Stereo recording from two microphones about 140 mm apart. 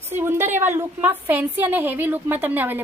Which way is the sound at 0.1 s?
15° right (ahead or behind).